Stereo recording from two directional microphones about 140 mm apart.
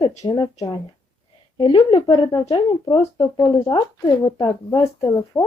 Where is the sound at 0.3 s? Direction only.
35° left (ahead or behind).